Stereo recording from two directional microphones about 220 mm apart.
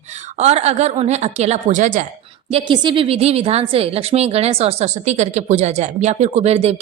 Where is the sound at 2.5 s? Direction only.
25° right (ahead or behind).